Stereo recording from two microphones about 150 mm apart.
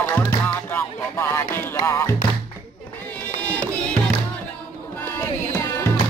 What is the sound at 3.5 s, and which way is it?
Music, 10° left (ahead or behind).